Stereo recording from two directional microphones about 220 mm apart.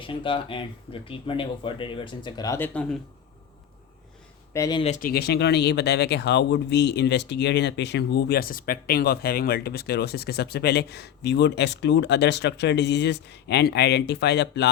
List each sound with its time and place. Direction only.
0.0 s speech: 25° left (ahead or behind); by 3.0 s 5° left (ahead or behind)
4.5 s speech: 15° left (ahead or behind)
4.8 s speech: 35° left (ahead or behind); by 14.7 s 50° left (ahead or behind)